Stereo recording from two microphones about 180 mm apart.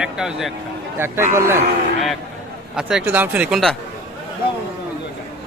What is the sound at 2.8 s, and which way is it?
Speech, 5° right (ahead or behind).